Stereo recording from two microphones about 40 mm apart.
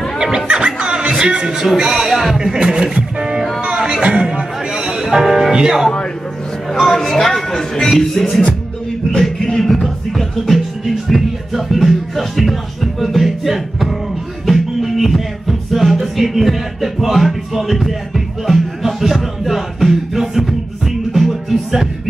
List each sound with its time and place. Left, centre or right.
0.5 s music: right
2.0 s speech: centre
4.0 s music: right
4.3 s music: centre
5.1 s speech: centre
6.7 s speech: centre
9.1 s music: centre